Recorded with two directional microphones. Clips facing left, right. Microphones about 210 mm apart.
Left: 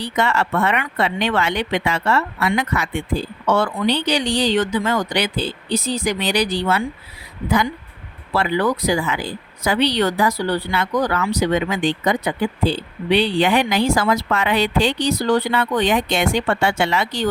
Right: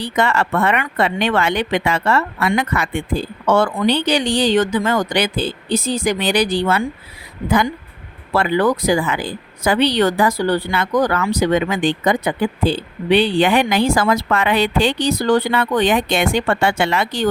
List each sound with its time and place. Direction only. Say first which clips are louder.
0.0 s speech: right 2 dB; 50° right (ahead or behind)